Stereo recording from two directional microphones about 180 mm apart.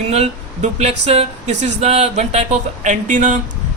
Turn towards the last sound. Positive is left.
turn(degrees=-45)  # may be behind; listen again after turning